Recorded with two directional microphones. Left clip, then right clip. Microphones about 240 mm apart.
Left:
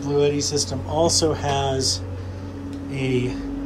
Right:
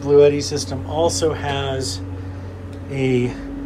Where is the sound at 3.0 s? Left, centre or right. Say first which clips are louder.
Right 5 dB; centre.